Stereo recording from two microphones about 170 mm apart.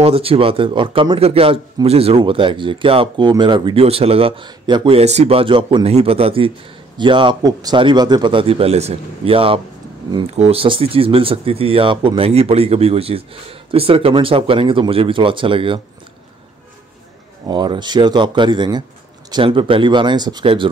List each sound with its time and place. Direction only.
0.0 s a man's voice: 35° right (ahead or behind)
17.5 s speech: 25° right (ahead or behind)